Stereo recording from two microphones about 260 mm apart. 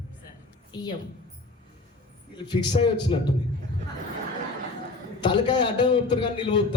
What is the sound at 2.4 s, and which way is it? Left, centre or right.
Speech, centre.